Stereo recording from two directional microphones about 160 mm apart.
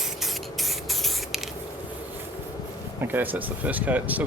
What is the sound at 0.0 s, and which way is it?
Spray, centre (ahead or behind).